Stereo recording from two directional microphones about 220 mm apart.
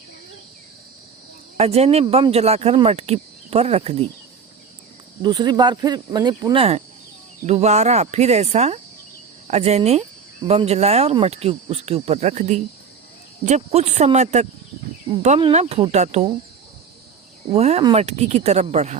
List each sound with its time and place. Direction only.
1.5 s speech: 30° right (ahead or behind)
5.2 s speech: 20° right (ahead or behind)
17.5 s speech: 30° right (ahead or behind)